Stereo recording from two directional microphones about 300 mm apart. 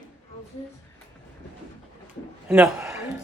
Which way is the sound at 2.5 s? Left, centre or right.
Centre.